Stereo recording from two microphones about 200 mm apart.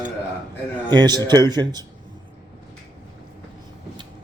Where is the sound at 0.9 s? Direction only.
20° right (ahead or behind).